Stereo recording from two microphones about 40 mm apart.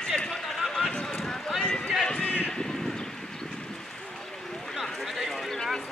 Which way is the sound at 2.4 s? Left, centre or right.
Centre.